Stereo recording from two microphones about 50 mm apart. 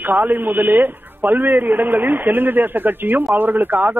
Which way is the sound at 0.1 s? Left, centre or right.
Right.